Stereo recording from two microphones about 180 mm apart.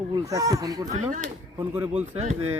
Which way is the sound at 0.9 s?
45° right (ahead or behind).